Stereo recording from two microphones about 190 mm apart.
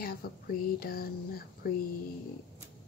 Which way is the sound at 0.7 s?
50° left (ahead or behind).